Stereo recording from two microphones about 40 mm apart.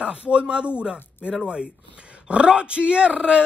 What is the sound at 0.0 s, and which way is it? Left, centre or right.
Speech, right.